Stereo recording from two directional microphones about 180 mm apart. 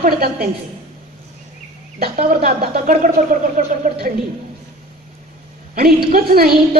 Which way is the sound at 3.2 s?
40° right (ahead or behind).